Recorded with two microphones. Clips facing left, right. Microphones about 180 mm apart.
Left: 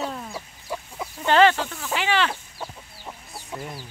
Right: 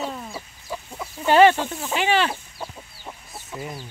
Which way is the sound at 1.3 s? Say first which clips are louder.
Right 3 dB; 15° right (ahead or behind).